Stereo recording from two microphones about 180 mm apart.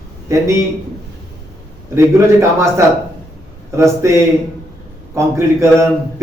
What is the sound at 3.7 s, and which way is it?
Speech, 15° right (ahead or behind).